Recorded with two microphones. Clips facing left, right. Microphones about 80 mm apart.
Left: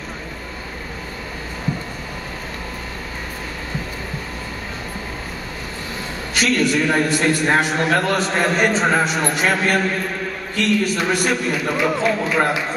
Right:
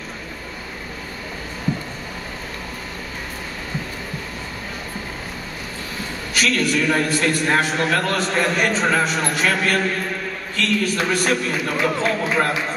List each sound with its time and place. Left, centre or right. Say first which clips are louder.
6.3 s a man's voice: left 2 dB; left